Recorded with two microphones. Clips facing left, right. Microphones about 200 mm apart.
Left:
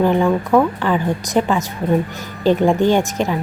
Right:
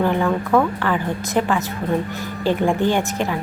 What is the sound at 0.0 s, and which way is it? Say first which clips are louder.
Speech: left 4 dB; 15° left (ahead or behind).